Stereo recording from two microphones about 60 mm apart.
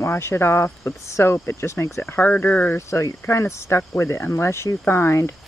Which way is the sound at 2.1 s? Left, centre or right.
Left.